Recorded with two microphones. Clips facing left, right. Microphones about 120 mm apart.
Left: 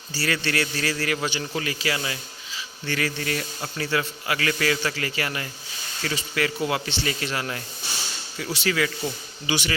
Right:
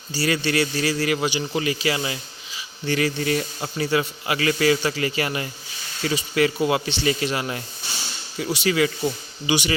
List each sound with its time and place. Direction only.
0.1 s a man's voice: 15° right (ahead or behind)